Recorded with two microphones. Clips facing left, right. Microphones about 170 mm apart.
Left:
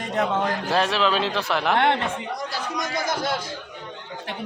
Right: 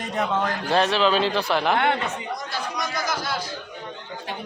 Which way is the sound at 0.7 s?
Centre (ahead or behind).